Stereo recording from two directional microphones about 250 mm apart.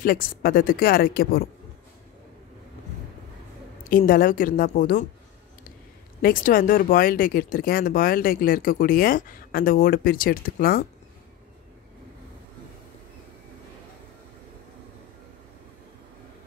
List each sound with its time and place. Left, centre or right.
0.0 s speech: left
3.8 s speech: left
6.2 s speech: left